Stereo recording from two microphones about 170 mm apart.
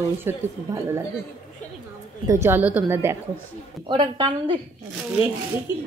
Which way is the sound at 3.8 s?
30° right (ahead or behind).